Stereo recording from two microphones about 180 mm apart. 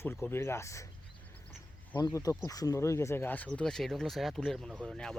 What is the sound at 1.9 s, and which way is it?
Speech, 20° left (ahead or behind).